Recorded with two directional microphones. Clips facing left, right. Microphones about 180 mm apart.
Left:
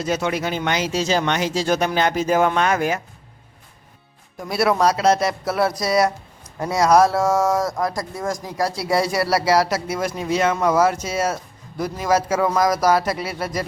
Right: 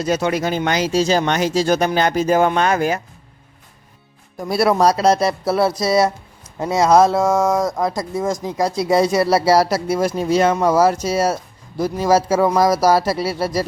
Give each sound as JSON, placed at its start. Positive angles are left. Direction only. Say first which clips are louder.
{"t": 0.0, "sound": "speech", "louder": "right 3 dB", "side_deg": -40}
{"t": 4.4, "sound": "speech", "louder": "right 3 dB", "side_deg": -35}